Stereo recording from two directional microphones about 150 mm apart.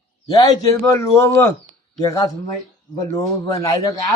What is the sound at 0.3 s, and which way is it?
Speech, 25° left (ahead or behind).